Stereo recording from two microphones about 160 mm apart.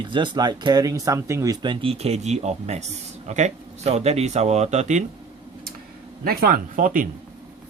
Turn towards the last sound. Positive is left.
turn(degrees=-55)  # may be behind; listen again after turning